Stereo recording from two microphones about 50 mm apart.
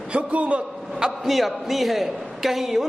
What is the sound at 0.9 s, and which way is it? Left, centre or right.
A man's voice, centre.